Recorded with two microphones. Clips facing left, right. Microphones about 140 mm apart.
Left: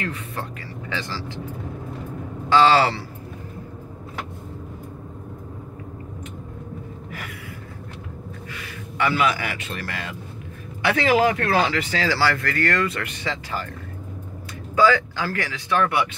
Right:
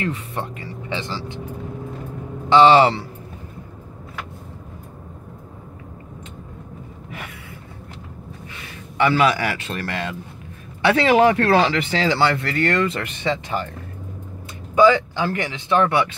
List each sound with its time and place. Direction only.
0.0 s speech: 25° right (ahead or behind)
2.5 s speech: 20° right (ahead or behind)
8.9 s a man's voice: 30° right (ahead or behind)
14.8 s speech: 20° right (ahead or behind)